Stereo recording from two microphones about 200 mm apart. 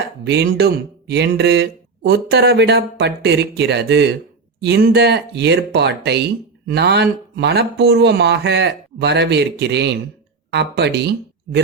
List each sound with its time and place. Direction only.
0.3 s speech: 55° right (ahead or behind)